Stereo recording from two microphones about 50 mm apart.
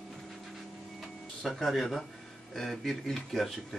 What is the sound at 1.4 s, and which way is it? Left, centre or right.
Speech, centre.